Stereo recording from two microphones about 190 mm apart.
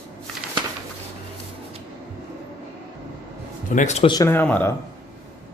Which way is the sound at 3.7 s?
40° left (ahead or behind).